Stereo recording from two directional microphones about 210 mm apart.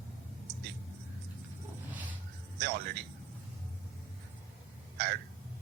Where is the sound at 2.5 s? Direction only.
50° right (ahead or behind).